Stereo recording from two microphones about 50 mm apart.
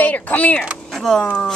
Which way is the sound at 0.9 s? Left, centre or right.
Centre.